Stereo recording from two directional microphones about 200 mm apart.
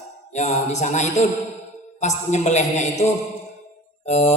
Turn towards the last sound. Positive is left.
turn(degrees=35)  # may be behind; listen again after turning